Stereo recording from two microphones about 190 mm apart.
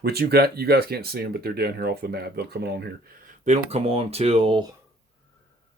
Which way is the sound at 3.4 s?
35° right (ahead or behind).